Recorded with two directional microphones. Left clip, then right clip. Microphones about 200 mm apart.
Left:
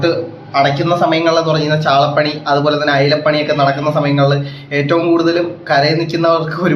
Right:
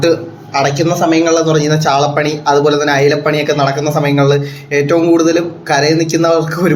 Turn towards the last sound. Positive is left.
turn(degrees=-15)  # may be behind; listen again after turning